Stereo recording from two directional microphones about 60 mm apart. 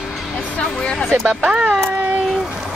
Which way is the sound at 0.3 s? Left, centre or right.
Centre.